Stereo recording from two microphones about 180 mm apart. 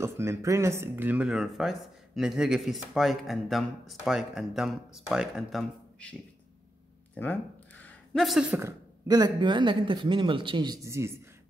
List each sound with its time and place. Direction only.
0.0 s speech: 15° right (ahead or behind); by 6.1 s 5° left (ahead or behind)
7.2 s a sound: 10° left (ahead or behind)
8.5 s speech: 20° right (ahead or behind)